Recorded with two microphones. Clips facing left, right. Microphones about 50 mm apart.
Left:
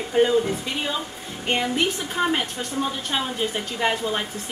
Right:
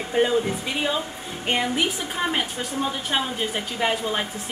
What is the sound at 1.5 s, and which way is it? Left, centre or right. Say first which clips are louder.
A woman's voice: left 1 dB; centre.